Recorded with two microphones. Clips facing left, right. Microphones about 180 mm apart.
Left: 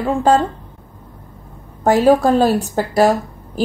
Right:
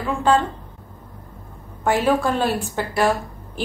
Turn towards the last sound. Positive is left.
turn(degrees=40)  # may be behind; listen again after turning